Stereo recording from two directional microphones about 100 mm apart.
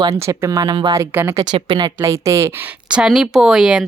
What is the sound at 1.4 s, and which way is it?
Speech, 45° right (ahead or behind).